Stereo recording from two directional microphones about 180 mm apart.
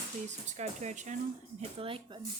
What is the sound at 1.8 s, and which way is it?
Speech, 30° right (ahead or behind).